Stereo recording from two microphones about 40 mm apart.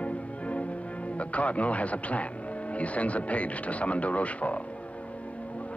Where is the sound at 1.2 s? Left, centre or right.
Left.